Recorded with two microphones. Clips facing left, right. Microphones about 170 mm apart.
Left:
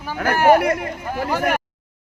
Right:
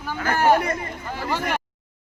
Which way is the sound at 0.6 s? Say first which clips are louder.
Left 6 dB; 70° left (ahead or behind).